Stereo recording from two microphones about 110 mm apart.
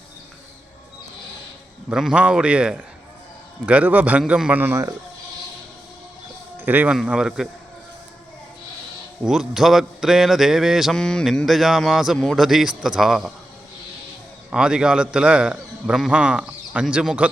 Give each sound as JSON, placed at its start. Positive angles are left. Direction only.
{"t": 1.9, "sound": "a man's voice", "side_deg": -5}
{"t": 6.6, "sound": "speech", "side_deg": -15}
{"t": 6.9, "sound": "speech", "side_deg": -5}
{"t": 9.2, "sound": "speech", "side_deg": -5}
{"t": 14.5, "sound": "a man's voice", "side_deg": -5}